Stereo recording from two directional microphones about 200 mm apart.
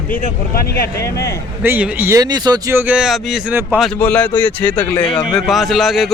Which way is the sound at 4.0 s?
10° left (ahead or behind).